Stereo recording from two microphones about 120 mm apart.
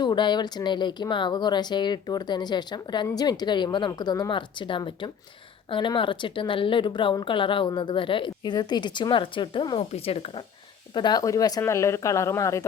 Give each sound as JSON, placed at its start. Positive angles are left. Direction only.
{"t": 0.0, "sound": "a woman's voice", "side_deg": 40}
{"t": 9.9, "sound": "speech", "side_deg": 55}
{"t": 10.9, "sound": "speech", "side_deg": 35}